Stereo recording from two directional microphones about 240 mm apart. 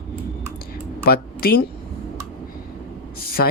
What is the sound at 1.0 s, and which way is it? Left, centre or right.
Speech, left.